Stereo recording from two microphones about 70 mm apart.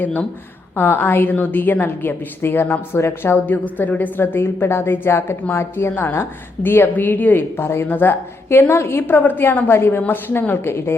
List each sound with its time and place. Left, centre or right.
0.0 s a woman's voice: left